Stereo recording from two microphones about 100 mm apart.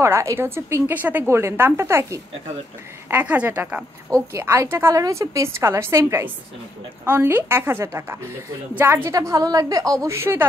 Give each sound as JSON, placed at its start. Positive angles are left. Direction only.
{"t": 0.0, "sound": "a woman's voice", "side_deg": -30}
{"t": 3.1, "sound": "a woman's voice", "side_deg": -15}
{"t": 4.1, "sound": "a woman's voice", "side_deg": -30}
{"t": 9.1, "sound": "a woman's voice", "side_deg": -35}